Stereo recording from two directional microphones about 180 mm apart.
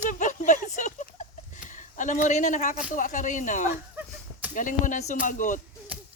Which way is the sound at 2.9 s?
45° left (ahead or behind).